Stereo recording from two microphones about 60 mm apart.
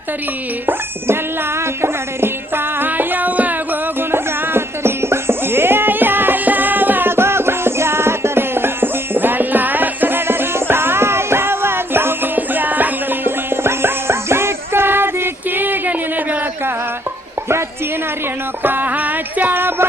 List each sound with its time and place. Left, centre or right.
0.7 s speech: right
2.8 s music: right
4.1 s dog: right
13.7 s music: right
18.6 s a sound: right